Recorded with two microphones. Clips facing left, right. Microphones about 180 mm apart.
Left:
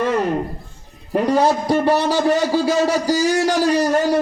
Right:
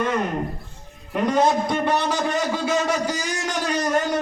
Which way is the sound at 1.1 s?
35° left (ahead or behind).